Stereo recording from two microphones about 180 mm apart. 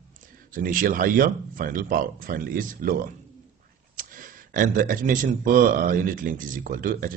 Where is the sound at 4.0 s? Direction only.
50° right (ahead or behind).